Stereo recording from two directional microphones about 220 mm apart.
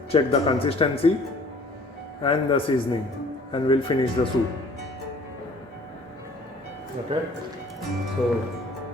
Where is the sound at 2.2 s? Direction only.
25° left (ahead or behind).